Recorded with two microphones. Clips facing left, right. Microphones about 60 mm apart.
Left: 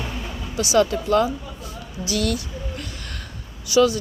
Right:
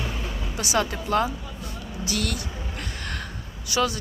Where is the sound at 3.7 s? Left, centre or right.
Right.